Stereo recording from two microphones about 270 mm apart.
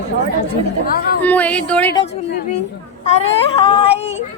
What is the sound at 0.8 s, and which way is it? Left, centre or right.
Speech, left.